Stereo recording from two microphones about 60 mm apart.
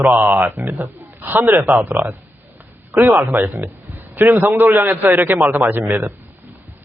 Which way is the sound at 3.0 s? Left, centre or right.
Right.